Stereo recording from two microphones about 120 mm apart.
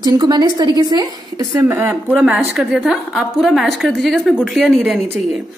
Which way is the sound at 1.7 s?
15° right (ahead or behind).